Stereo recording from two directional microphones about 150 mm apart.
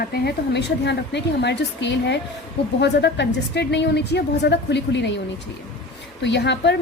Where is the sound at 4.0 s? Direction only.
90° left.